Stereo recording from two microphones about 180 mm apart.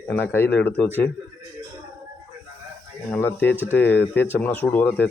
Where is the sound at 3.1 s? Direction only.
10° left (ahead or behind).